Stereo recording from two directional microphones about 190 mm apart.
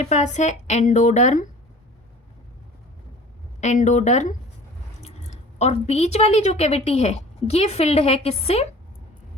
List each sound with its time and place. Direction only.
0.0 s a woman's voice: 35° left (ahead or behind)
3.6 s a woman's voice: 40° left (ahead or behind)
5.5 s a woman's voice: 35° left (ahead or behind)